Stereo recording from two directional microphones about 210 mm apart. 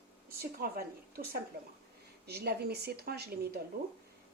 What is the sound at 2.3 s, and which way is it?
Speech, 50° right (ahead or behind).